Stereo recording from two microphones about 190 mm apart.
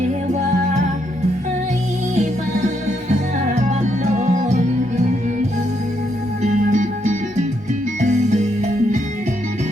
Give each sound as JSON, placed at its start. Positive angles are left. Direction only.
{"t": 3.5, "sound": "music", "side_deg": -35}
{"t": 6.4, "sound": "music", "side_deg": -40}